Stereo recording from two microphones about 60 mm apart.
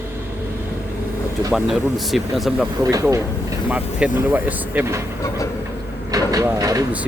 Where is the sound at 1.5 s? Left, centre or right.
Centre.